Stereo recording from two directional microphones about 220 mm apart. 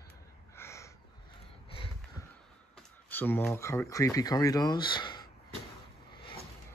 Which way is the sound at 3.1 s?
10° left (ahead or behind).